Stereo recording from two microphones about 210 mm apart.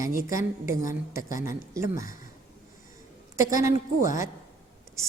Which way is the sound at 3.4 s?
15° right (ahead or behind).